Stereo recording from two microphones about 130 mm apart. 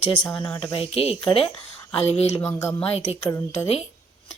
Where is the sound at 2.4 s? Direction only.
20° left (ahead or behind).